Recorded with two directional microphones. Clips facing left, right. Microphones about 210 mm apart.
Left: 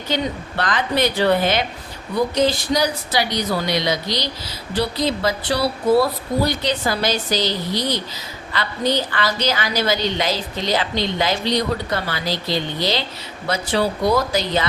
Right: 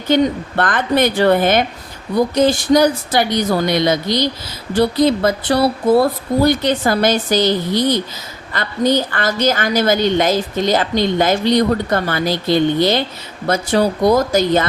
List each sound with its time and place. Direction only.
0.1 s a woman's voice: 50° right (ahead or behind)